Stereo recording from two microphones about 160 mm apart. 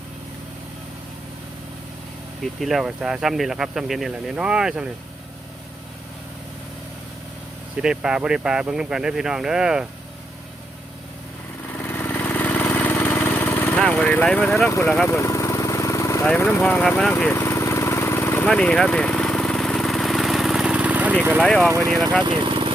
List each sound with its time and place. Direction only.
2.4 s speech: centre (ahead or behind)
7.8 s speech: 5° right (ahead or behind)
11.7 s lawn mower: 10° left (ahead or behind)
13.7 s speech: 5° left (ahead or behind)
14.7 s speech: 15° left (ahead or behind)
15.0 s vehicle: 15° left (ahead or behind)
16.2 s speech: 10° left (ahead or behind)
17.0 s lawn mower: 10° left (ahead or behind); by 21.4 s 10° right (ahead or behind)
21.4 s speech: 5° left (ahead or behind)
21.7 s speech: 20° right (ahead or behind)
22.2 s speech: 30° right (ahead or behind)